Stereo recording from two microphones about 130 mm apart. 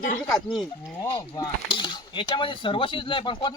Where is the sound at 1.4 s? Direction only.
40° left (ahead or behind).